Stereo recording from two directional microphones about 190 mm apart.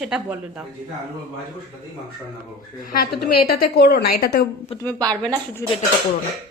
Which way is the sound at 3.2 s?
55° left (ahead or behind).